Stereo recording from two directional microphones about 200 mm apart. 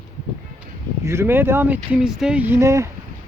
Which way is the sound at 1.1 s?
10° right (ahead or behind).